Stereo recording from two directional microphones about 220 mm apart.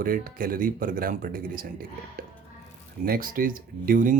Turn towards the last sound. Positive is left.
turn(degrees=-40)  # may be behind; listen again after turning